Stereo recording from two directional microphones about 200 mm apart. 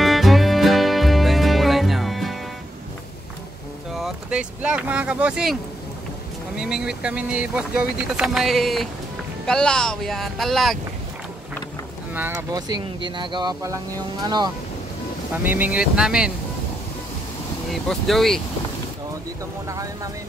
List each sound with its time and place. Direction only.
0.0 s music: centre (ahead or behind)
4.0 s speech: 5° right (ahead or behind)
12.1 s speech: 10° right (ahead or behind)
15.3 s speech: 10° right (ahead or behind)
17.8 s speech: centre (ahead or behind)
19.7 s speech: 15° right (ahead or behind)